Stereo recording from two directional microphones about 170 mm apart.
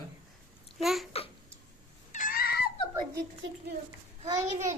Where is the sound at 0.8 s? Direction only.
Centre (ahead or behind).